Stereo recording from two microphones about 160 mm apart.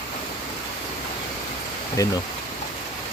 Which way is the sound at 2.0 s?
20° left (ahead or behind).